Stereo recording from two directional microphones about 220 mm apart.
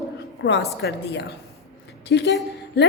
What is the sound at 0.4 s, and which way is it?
A man's voice, 55° left (ahead or behind).